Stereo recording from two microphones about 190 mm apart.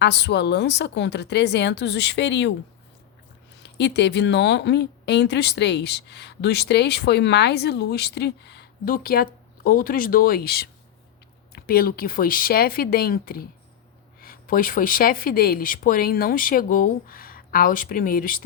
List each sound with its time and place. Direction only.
0.0 s speech: 60° left (ahead or behind)
3.6 s speech: 65° left (ahead or behind); by 18.4 s 45° left (ahead or behind)